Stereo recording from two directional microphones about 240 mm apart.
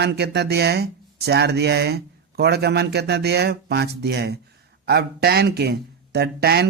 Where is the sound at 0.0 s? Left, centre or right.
Right.